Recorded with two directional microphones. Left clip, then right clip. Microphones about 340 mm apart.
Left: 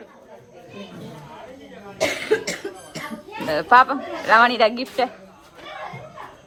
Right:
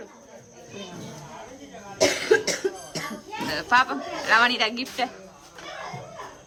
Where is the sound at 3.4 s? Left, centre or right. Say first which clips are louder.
Left 7 dB; centre.